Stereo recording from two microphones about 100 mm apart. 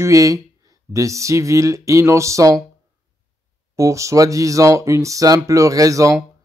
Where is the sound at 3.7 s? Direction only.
30° right (ahead or behind).